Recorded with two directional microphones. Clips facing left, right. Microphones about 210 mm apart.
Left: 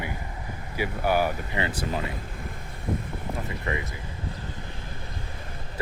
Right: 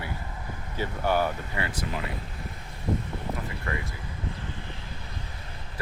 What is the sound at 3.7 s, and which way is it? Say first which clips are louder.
Speech: left 3 dB; 20° left (ahead or behind).